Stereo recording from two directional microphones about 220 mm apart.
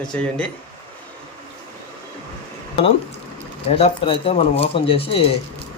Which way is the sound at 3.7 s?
25° left (ahead or behind).